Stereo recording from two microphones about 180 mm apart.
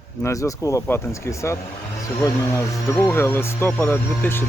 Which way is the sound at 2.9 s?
15° left (ahead or behind).